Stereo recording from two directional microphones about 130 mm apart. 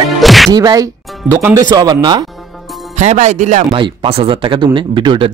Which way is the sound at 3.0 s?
65° right (ahead or behind).